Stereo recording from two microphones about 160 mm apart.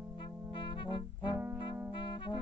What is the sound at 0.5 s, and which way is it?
Music, 30° left (ahead or behind).